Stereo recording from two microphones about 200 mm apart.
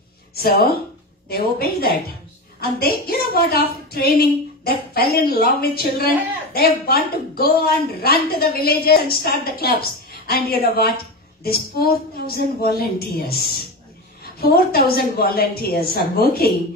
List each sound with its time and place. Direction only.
0.3 s a woman's voice: 50° left (ahead or behind)